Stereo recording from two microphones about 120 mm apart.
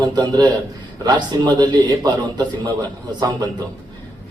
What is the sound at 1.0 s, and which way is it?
Speech, 35° right (ahead or behind).